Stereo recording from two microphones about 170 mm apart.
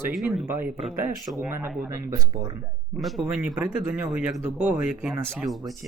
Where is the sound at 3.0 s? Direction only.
Centre (ahead or behind).